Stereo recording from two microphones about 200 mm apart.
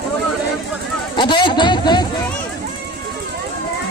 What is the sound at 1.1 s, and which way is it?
Speech, 25° left (ahead or behind).